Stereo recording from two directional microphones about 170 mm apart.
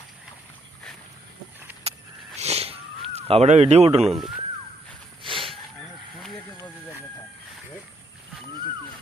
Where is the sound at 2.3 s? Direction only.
40° right (ahead or behind).